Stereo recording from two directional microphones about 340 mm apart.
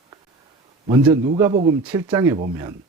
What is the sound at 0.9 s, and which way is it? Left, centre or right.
Speech, centre.